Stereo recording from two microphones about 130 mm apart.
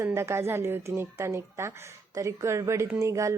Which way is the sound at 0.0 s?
20° right (ahead or behind).